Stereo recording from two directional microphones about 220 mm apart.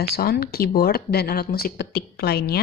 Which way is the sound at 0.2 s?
45° left (ahead or behind).